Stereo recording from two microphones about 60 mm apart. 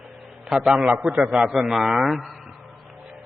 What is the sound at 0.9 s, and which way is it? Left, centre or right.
Speech, right.